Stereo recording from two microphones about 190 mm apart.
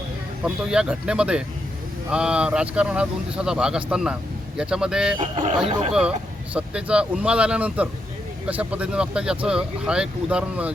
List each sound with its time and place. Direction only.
0.4 s speech: 5° right (ahead or behind)
5.2 s speech: 35° right (ahead or behind)
5.9 s speech: 5° right (ahead or behind)